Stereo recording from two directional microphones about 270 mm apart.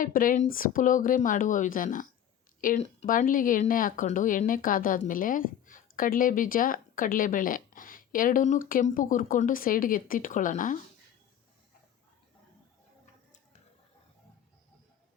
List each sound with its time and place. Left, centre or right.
0.0 s a woman's voice: left